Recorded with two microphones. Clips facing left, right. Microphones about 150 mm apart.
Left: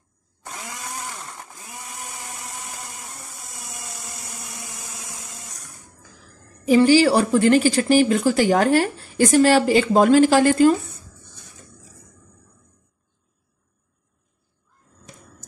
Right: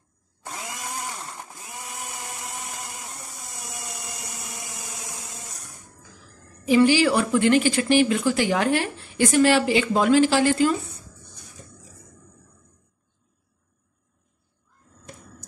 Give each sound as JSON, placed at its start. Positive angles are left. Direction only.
{"t": 6.7, "sound": "speech", "side_deg": 40}